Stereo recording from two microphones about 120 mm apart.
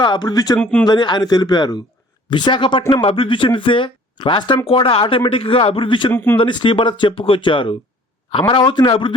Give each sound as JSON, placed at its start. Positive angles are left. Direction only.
{"t": 0.0, "sound": "speech", "side_deg": 35}
{"t": 0.6, "sound": "speech", "side_deg": 10}
{"t": 0.9, "sound": "speech", "side_deg": 40}
{"t": 6.1, "sound": "speech", "side_deg": 15}
{"t": 6.4, "sound": "speech", "side_deg": 45}